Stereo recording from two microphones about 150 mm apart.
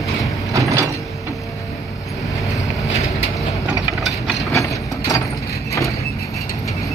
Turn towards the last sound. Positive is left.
turn(degrees=20)  # may be behind; listen again after turning